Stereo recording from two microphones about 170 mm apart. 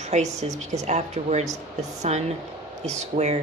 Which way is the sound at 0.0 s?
45° right (ahead or behind).